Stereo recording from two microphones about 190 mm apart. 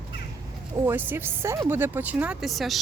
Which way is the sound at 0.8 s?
10° right (ahead or behind).